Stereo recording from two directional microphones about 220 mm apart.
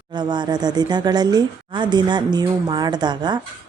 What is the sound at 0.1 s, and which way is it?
Speech, 20° right (ahead or behind).